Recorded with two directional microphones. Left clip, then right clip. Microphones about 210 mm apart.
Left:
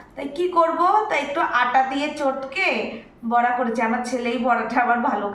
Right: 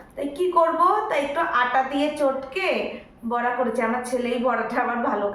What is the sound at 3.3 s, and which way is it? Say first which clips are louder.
Speech: left 4 dB; 10° right (ahead or behind).